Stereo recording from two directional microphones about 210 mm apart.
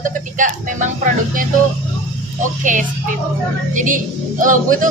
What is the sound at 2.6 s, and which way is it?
A woman's voice, 35° right (ahead or behind).